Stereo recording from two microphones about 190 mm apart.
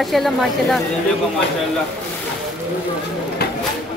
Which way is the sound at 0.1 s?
Centre (ahead or behind).